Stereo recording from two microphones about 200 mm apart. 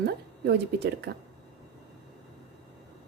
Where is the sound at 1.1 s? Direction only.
55° right (ahead or behind).